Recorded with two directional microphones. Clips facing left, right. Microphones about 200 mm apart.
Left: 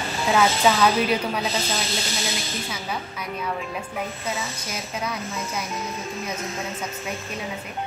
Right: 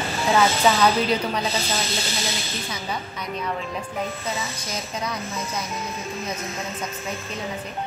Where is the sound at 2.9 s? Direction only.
5° left (ahead or behind).